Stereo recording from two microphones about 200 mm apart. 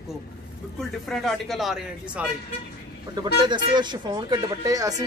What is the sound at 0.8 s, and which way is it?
Speech, centre (ahead or behind).